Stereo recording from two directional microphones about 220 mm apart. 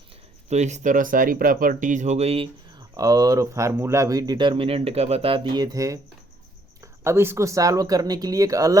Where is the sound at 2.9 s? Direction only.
15° right (ahead or behind).